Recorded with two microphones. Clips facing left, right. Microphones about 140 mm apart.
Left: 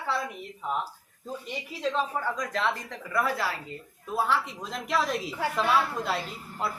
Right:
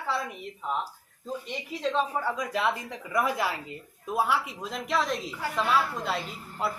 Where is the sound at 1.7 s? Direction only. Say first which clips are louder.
Right 1 dB; centre (ahead or behind).